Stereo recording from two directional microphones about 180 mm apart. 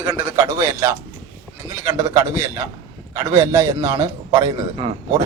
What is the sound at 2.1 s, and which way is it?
A man's voice, 15° right (ahead or behind).